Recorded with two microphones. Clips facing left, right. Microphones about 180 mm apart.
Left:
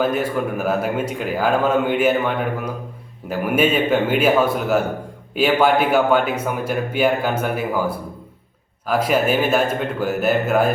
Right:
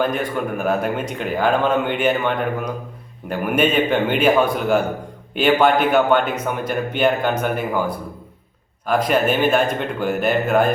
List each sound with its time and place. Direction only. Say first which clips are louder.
0.0 s speech: left 1 dB; 5° left (ahead or behind)